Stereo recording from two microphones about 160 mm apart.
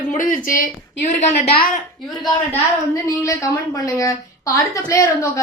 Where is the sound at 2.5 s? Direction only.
20° left (ahead or behind).